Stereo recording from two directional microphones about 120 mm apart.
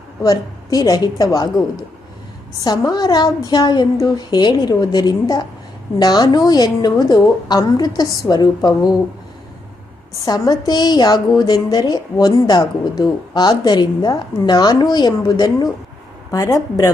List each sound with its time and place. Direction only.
0.2 s a woman's voice: 30° left (ahead or behind)
10.2 s a woman's voice: 35° left (ahead or behind)